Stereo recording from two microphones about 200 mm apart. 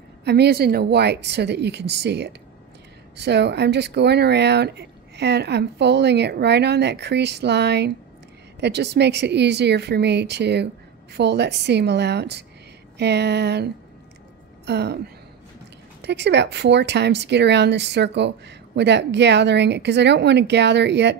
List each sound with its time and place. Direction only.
0.2 s a woman's voice: 55° right (ahead or behind)
14.7 s a woman's voice: 55° right (ahead or behind)
16.0 s a woman's voice: 60° right (ahead or behind)